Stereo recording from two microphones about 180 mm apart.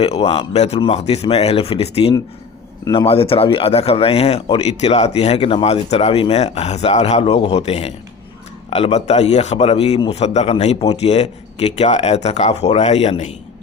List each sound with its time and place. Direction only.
0.0 s a man's voice: 35° left (ahead or behind)